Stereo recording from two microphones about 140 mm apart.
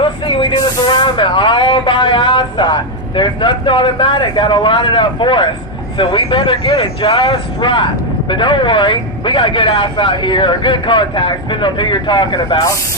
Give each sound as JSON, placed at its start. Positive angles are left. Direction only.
{"t": 0.0, "sound": "spray", "side_deg": 35}
{"t": 3.2, "sound": "speech", "side_deg": 35}